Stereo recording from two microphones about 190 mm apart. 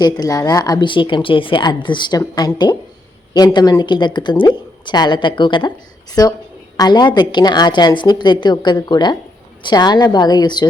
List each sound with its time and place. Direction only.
0.2 s speech: 20° left (ahead or behind)